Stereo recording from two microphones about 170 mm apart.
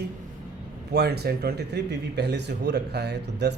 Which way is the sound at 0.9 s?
70° right (ahead or behind).